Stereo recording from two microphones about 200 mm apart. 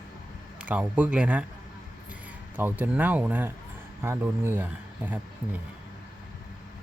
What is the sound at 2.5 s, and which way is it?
A man's voice, 10° right (ahead or behind).